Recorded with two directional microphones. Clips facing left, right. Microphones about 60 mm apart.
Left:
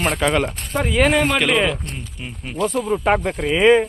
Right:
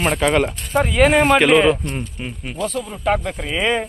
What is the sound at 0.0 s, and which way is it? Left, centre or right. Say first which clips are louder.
Speech: right 2 dB; centre.